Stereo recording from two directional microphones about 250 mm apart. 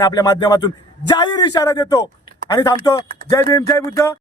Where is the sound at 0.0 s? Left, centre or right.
Centre.